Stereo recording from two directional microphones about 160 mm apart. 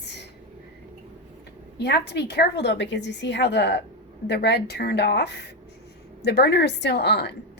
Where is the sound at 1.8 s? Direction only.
90° left.